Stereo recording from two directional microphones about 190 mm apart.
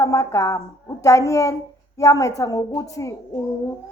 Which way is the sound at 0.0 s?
15° left (ahead or behind).